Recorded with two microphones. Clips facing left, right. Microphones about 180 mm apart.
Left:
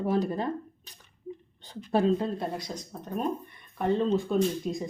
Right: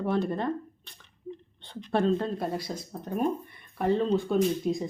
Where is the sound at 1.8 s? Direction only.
5° left (ahead or behind).